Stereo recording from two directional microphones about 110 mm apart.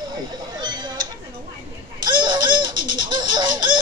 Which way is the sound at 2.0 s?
45° right (ahead or behind).